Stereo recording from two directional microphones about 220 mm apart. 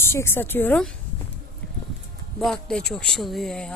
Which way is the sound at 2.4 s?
Centre (ahead or behind).